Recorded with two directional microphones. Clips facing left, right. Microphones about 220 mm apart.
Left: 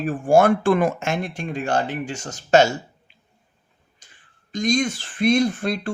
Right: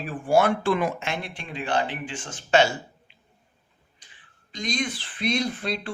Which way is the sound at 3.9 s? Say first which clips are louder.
Left 1 dB; 45° left (ahead or behind).